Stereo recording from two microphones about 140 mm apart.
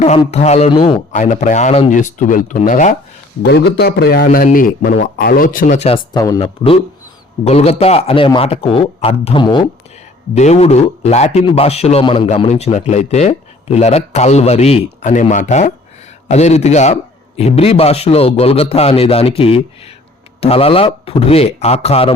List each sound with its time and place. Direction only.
0.3 s a man's voice: 50° left (ahead or behind)
0.7 s a man's voice: 35° left (ahead or behind)
1.1 s speech: 60° left (ahead or behind)
1.9 s speech: 65° left (ahead or behind)
3.8 s a man's voice: 90° left; by 5.9 s 60° left (ahead or behind)
6.1 s speech: 25° left (ahead or behind)
7.4 s a man's voice: 50° left (ahead or behind)
10.3 s a man's voice: 55° left (ahead or behind)